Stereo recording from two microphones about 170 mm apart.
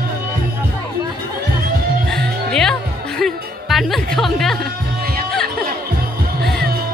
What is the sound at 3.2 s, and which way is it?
Speech, centre (ahead or behind).